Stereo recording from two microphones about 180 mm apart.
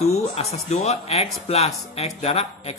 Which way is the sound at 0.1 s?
35° left (ahead or behind).